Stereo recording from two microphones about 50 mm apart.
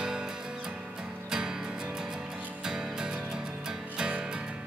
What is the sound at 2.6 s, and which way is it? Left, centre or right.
Music, centre.